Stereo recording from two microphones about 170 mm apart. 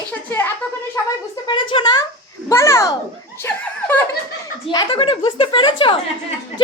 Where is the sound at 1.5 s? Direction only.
30° left (ahead or behind).